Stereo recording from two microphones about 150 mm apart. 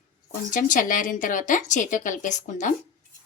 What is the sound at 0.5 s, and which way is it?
Speech, 65° left (ahead or behind).